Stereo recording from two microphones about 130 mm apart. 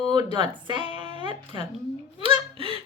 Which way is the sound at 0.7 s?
40° right (ahead or behind).